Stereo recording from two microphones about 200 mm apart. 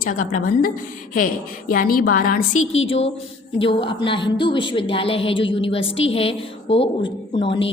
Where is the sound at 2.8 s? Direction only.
30° left (ahead or behind).